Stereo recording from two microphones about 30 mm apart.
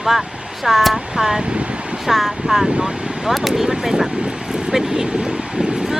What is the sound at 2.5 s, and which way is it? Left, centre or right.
Speech, right.